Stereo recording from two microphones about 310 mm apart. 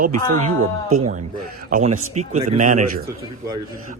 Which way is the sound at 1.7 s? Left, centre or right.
Right.